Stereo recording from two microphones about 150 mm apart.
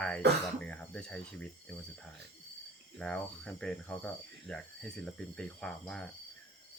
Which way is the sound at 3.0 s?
5° left (ahead or behind).